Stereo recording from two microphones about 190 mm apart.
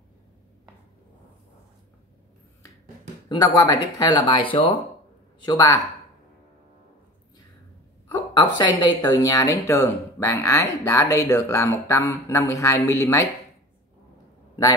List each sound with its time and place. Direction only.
3.3 s speech: 20° left (ahead or behind)
8.1 s a woman's voice: 20° left (ahead or behind)